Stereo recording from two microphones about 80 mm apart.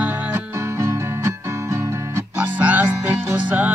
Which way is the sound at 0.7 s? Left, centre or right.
Right.